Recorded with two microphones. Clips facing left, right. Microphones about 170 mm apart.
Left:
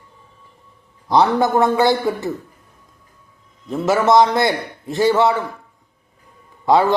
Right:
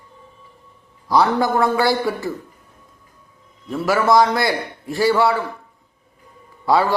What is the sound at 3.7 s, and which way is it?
A man's voice, 20° left (ahead or behind).